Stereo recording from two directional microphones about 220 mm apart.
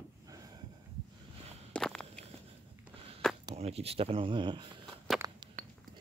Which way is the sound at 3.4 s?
25° right (ahead or behind).